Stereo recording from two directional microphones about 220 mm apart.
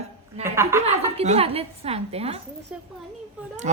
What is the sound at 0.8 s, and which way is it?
Speech, 30° right (ahead or behind).